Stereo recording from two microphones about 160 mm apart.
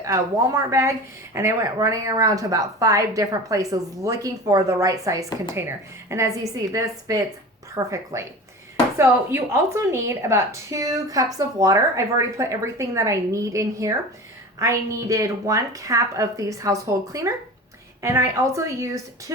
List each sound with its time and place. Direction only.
0.0 s speech: 20° right (ahead or behind)